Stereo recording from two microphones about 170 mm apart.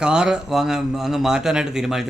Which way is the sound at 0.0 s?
5° right (ahead or behind).